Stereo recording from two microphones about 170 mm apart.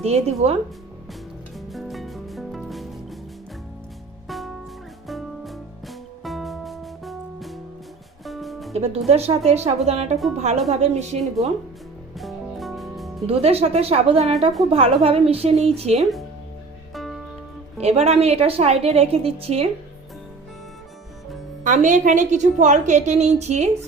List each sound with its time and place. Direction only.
0.0 s a woman's voice: 40° right (ahead or behind)
1.5 s music: centre (ahead or behind)
4.3 s music: centre (ahead or behind)
8.7 s a woman's voice: 40° right (ahead or behind)
12.1 s music: centre (ahead or behind)
13.2 s a woman's voice: 35° right (ahead or behind)
16.9 s music: centre (ahead or behind)
17.7 s a woman's voice: 40° right (ahead or behind)
21.6 s a woman's voice: 45° right (ahead or behind)